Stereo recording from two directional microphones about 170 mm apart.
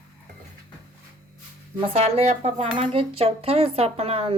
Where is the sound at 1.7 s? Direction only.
35° right (ahead or behind).